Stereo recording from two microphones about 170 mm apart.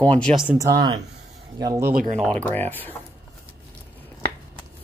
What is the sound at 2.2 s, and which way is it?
Speech, 5° left (ahead or behind).